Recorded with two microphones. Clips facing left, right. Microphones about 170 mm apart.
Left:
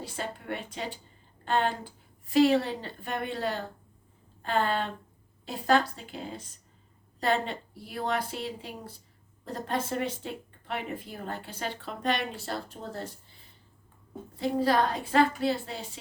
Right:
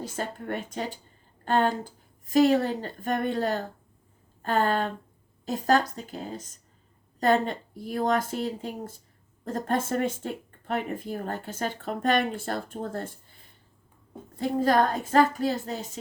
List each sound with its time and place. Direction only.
0.0 s speech: 45° right (ahead or behind)
14.3 s speech: 50° right (ahead or behind)